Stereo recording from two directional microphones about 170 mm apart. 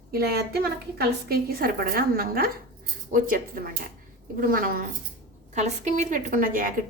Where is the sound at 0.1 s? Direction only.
65° right (ahead or behind).